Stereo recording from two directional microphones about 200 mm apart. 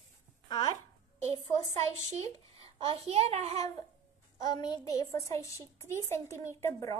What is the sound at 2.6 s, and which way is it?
A child's voice, 30° right (ahead or behind).